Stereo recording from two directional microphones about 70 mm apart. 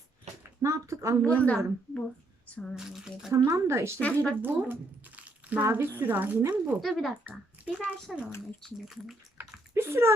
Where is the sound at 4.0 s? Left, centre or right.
Centre.